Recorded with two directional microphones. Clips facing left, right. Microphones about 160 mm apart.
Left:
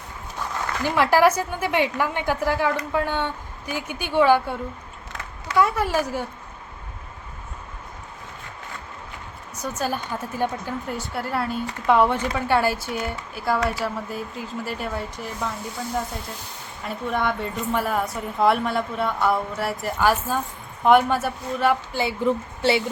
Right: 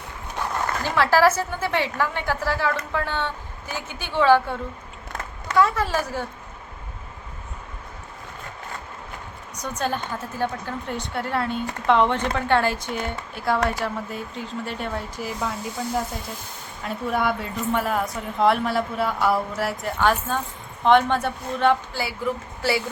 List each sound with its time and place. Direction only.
0.8 s a woman's voice: 15° left (ahead or behind)
5.5 s a woman's voice: 10° left (ahead or behind)
9.6 s a woman's voice: 5° left (ahead or behind)
10.8 s a woman's voice: 5° left (ahead or behind)
16.8 s a woman's voice: centre (ahead or behind)
21.9 s speech: 25° left (ahead or behind)